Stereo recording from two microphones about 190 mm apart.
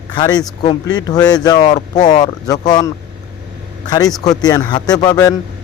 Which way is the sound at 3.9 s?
20° left (ahead or behind).